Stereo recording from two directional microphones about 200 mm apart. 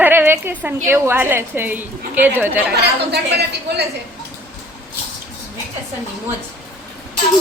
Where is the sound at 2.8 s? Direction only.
55° right (ahead or behind).